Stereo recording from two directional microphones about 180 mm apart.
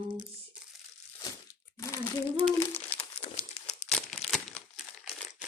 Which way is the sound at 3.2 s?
35° left (ahead or behind).